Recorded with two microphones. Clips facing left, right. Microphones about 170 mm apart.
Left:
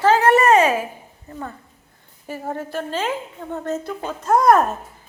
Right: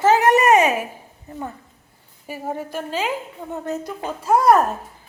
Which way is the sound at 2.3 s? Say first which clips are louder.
Even; 15° right (ahead or behind).